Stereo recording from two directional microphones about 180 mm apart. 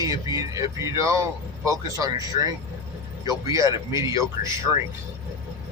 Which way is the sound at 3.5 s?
20° right (ahead or behind).